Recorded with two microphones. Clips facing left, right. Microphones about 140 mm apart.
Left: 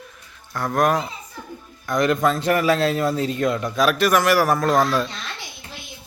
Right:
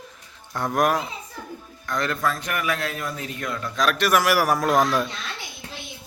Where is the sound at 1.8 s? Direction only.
15° left (ahead or behind).